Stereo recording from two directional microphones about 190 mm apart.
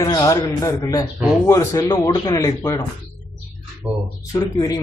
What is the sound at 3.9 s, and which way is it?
Speech, 10° right (ahead or behind).